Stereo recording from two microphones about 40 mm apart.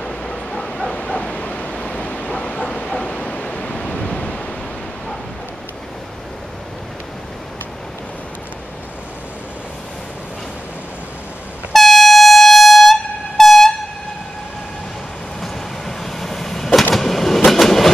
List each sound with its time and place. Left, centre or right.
0.0 s bow-wow: left
0.9 s bow-wow: left
1.7 s a sound: left
11.7 s train: centre
16.0 s vehicle: centre
16.9 s train: centre